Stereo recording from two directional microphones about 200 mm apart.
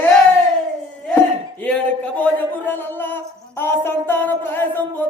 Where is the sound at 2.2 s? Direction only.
10° left (ahead or behind).